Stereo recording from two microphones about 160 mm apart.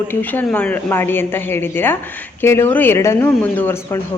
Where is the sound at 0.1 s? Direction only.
10° left (ahead or behind).